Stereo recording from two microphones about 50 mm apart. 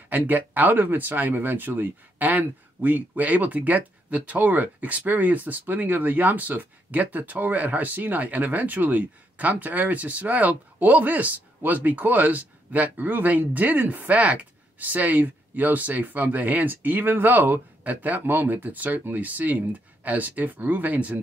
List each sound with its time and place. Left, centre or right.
0.1 s speech: right